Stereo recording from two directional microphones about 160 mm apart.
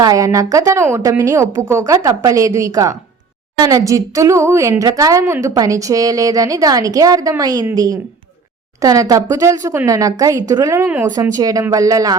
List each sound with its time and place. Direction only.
0.0 s speech: 20° right (ahead or behind)
11.1 s speech: 20° right (ahead or behind)